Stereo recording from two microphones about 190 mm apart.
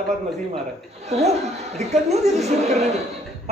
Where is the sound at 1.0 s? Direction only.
35° right (ahead or behind).